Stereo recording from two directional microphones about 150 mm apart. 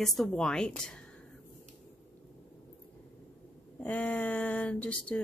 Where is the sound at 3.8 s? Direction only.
10° left (ahead or behind).